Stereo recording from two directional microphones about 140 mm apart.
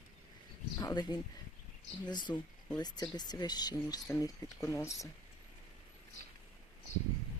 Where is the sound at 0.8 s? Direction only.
30° left (ahead or behind).